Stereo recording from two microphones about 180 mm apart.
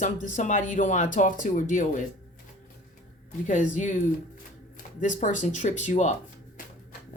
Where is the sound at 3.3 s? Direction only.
45° left (ahead or behind).